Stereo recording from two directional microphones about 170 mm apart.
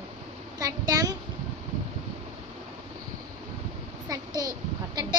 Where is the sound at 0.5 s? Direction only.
20° right (ahead or behind).